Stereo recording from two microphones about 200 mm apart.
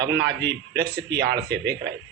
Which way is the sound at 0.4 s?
55° right (ahead or behind).